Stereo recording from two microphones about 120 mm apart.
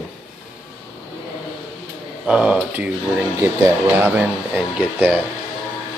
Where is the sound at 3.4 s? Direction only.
20° right (ahead or behind).